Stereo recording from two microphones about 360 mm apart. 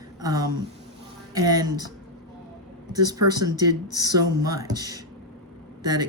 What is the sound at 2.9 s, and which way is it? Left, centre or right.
Speech, centre.